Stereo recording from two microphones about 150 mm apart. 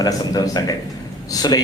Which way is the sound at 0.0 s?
25° left (ahead or behind).